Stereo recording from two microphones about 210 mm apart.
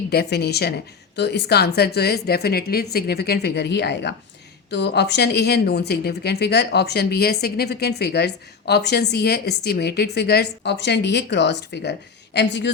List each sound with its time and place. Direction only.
0.1 s speech: 50° left (ahead or behind)